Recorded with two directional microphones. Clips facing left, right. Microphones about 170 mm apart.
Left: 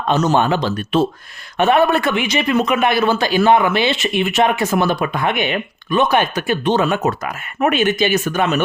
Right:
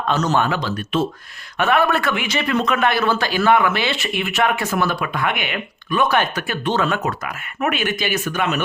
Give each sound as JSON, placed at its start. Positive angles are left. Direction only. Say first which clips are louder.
{"t": 0.3, "sound": "a man's voice", "louder": "left 4 dB", "side_deg": 25}